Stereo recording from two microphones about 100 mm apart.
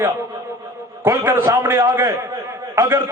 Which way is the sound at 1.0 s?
25° right (ahead or behind).